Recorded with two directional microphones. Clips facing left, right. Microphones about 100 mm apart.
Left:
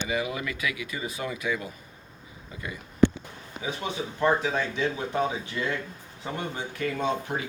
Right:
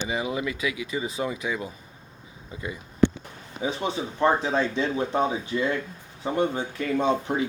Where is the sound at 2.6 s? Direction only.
20° right (ahead or behind).